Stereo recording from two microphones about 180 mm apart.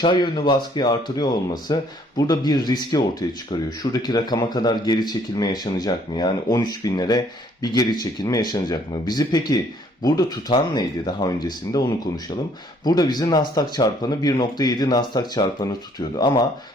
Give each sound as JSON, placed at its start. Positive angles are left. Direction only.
{"t": 0.0, "sound": "speech", "side_deg": 25}